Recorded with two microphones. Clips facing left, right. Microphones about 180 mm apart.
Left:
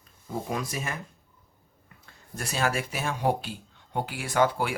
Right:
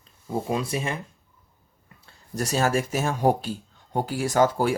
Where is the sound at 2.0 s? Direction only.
40° right (ahead or behind).